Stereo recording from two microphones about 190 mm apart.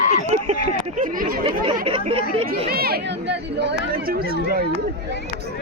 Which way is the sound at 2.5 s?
55° right (ahead or behind).